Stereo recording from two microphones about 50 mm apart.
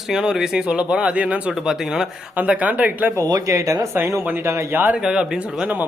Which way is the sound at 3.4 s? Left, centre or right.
Right.